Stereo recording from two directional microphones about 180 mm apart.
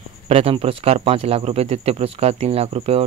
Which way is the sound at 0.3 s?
35° right (ahead or behind).